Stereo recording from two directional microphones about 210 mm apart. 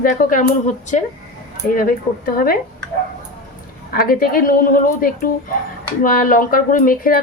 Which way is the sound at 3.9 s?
45° left (ahead or behind).